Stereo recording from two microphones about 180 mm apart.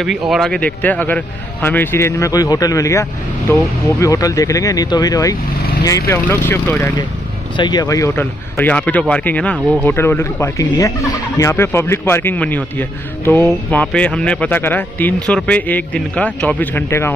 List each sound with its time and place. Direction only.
0.3 s speech: 5° left (ahead or behind)